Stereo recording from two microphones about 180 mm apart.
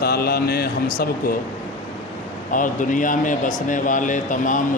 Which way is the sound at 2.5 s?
45° left (ahead or behind).